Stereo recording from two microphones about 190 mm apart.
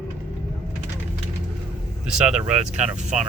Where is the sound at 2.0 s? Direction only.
5° right (ahead or behind).